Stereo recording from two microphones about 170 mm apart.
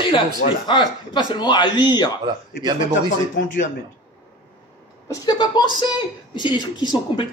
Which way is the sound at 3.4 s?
90° left.